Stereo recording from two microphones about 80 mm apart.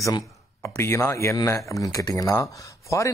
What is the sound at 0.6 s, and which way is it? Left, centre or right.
A man's voice, left.